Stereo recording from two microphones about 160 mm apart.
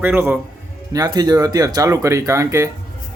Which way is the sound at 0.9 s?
25° right (ahead or behind).